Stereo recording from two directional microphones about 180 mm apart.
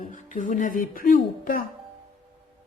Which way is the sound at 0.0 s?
45° left (ahead or behind).